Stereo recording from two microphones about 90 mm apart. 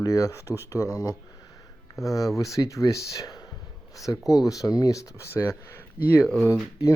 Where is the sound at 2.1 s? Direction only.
40° left (ahead or behind).